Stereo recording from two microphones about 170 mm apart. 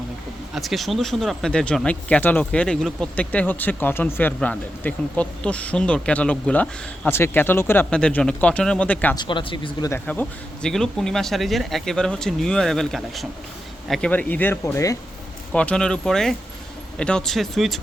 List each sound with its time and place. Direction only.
0.5 s speech: centre (ahead or behind)
9.1 s speech: 30° left (ahead or behind)
9.9 s speech: 10° left (ahead or behind)
15.5 s speech: 5° left (ahead or behind)